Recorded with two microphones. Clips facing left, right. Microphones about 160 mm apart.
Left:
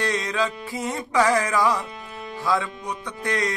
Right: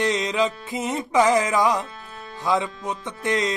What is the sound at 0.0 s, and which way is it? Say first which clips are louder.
Music: right 3 dB; 20° right (ahead or behind).